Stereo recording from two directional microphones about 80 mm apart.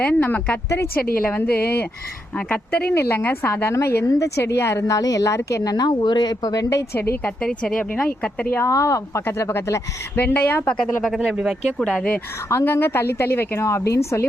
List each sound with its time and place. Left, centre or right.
0.0 s a woman's voice: centre; by 5.7 s left
5.7 s speech: left
6.9 s a woman's voice: left
7.4 s speech: centre
8.5 s a woman's voice: left
11.0 s speech: centre
12.5 s a woman's voice: left